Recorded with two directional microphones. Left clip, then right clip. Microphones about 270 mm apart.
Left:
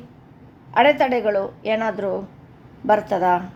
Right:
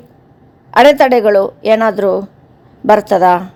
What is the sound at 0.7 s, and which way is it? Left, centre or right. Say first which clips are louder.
A woman's voice: right 9 dB; right.